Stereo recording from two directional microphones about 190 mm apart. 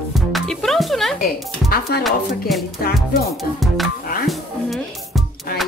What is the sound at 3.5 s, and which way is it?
Music, centre (ahead or behind).